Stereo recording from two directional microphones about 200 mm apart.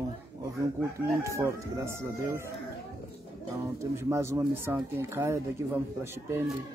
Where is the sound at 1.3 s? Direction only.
15° right (ahead or behind).